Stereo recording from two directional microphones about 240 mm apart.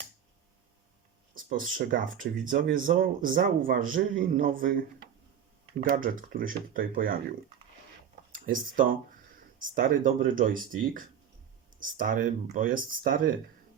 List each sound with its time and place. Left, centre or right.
1.3 s a man's voice: right
8.3 s a man's voice: right
11.8 s a man's voice: right